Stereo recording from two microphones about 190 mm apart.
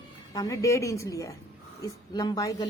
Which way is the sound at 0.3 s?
20° left (ahead or behind).